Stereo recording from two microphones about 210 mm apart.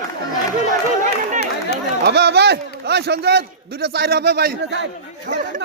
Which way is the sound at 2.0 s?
50° right (ahead or behind).